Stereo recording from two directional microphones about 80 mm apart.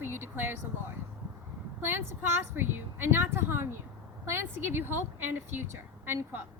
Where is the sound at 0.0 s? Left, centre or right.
Right.